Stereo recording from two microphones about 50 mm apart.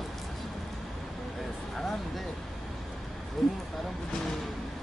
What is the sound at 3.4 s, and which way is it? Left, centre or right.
Speech, centre.